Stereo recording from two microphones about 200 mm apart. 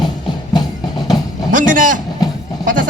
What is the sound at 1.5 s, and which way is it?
Speech, 40° right (ahead or behind).